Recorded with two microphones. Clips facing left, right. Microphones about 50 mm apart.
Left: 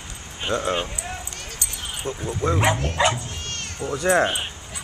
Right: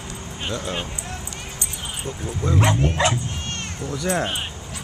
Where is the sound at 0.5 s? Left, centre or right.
Left.